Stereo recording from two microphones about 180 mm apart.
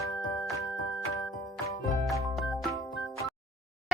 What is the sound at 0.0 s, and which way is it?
Music, 15° left (ahead or behind).